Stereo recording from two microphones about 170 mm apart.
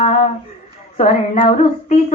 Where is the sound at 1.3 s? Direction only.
40° left (ahead or behind).